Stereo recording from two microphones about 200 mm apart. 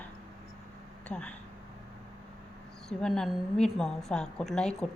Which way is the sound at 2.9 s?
5° left (ahead or behind).